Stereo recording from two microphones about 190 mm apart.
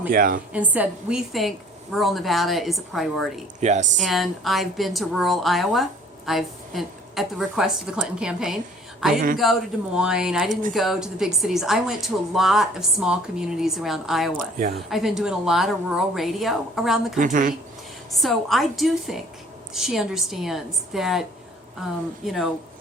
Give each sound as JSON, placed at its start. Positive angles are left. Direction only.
{"t": 0.1, "sound": "a woman's voice", "side_deg": -50}
{"t": 0.5, "sound": "a woman's voice", "side_deg": -10}
{"t": 3.6, "sound": "speech", "side_deg": -40}
{"t": 4.0, "sound": "a woman's voice", "side_deg": 0}
{"t": 10.5, "sound": "a woman's voice", "side_deg": -45}
{"t": 10.8, "sound": "a woman's voice", "side_deg": 0}
{"t": 17.2, "sound": "a woman's voice", "side_deg": -45}
{"t": 18.1, "sound": "a woman's voice", "side_deg": 0}